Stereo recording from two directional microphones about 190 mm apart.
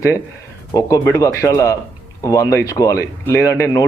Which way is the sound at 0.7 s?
20° left (ahead or behind).